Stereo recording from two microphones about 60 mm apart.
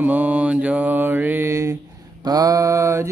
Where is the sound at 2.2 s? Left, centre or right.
Right.